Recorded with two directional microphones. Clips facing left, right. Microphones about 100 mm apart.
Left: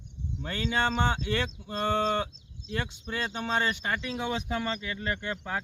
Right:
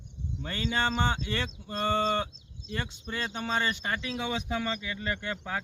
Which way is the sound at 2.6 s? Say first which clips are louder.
Left 2 dB; 25° right (ahead or behind).